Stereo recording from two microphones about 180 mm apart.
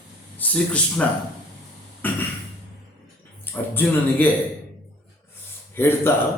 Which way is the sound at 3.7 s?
10° left (ahead or behind).